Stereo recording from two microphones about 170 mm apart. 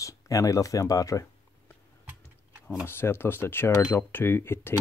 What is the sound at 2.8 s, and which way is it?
Speech, 15° left (ahead or behind).